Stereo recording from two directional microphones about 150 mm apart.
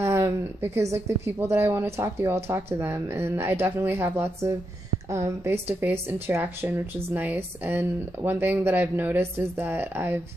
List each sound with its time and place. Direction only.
0.0 s a woman's voice: 15° right (ahead or behind)